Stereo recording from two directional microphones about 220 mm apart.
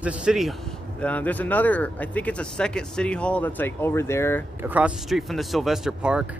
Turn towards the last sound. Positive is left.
turn(degrees=-5)  # may be behind; listen again after turning